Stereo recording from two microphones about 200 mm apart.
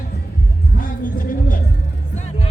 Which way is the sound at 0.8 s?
45° left (ahead or behind).